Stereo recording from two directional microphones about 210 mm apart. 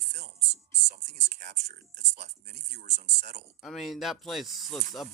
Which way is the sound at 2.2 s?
50° right (ahead or behind).